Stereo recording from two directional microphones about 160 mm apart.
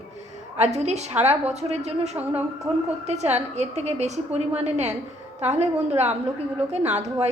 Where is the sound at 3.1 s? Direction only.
45° right (ahead or behind).